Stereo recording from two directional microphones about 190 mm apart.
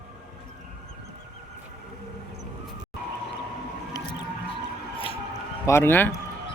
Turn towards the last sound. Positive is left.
turn(degrees=10)  # may be behind; listen again after turning